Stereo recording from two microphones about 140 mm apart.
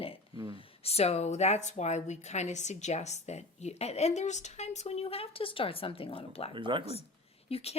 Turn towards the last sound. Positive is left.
turn(degrees=45)  # may be behind; listen again after turning